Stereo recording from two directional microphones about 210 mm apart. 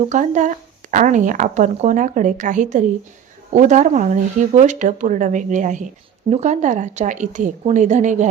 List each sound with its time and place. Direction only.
0.1 s speech: 35° right (ahead or behind)